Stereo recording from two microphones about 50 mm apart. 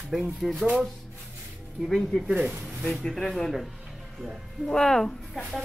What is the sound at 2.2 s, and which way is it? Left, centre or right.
Speech, centre.